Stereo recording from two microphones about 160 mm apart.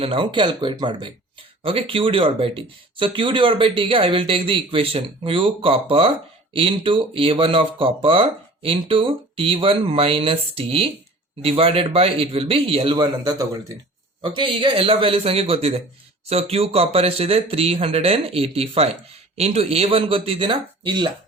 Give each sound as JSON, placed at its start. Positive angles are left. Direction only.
{"t": 0.0, "sound": "speech", "side_deg": -35}